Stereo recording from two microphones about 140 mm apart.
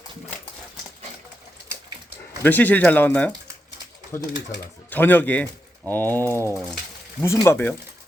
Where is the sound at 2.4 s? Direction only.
10° left (ahead or behind).